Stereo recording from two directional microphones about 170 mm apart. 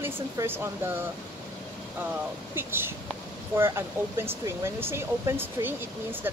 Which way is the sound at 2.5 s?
15° right (ahead or behind).